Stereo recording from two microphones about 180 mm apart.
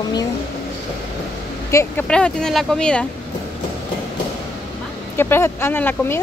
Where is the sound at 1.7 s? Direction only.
15° left (ahead or behind).